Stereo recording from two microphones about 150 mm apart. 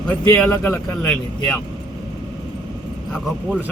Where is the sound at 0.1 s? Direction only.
10° left (ahead or behind).